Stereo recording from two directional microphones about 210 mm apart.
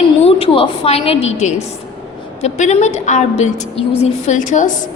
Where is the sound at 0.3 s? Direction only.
25° left (ahead or behind).